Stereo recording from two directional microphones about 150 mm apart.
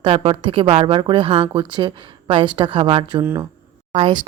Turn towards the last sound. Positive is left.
turn(degrees=-35)  # may be behind; listen again after turning